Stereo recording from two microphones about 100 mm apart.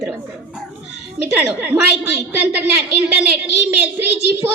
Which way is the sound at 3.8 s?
20° right (ahead or behind).